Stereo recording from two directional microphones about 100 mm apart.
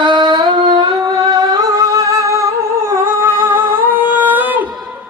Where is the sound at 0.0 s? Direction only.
50° right (ahead or behind); by 4.7 s 20° right (ahead or behind).